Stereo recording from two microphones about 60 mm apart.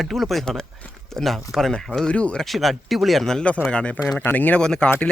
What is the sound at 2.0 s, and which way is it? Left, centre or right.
Speech, centre.